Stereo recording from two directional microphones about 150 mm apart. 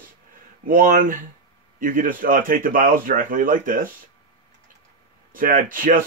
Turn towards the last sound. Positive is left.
turn(degrees=-65)  # may be behind; listen again after turning